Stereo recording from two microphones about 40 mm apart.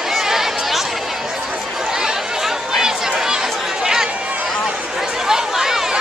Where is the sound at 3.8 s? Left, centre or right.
Centre.